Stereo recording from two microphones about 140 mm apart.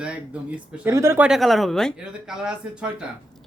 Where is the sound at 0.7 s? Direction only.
15° right (ahead or behind).